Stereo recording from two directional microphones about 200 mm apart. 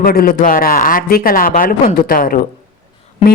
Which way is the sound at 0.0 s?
50° left (ahead or behind).